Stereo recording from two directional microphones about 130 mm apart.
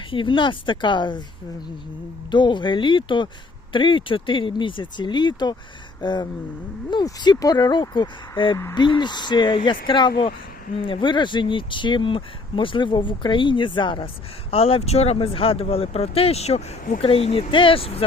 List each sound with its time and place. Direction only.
0.1 s speech: 40° left (ahead or behind)
2.3 s speech: 35° left (ahead or behind)
14.5 s speech: 50° left (ahead or behind)